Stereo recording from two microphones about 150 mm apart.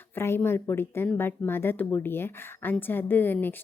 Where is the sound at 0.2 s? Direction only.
15° left (ahead or behind).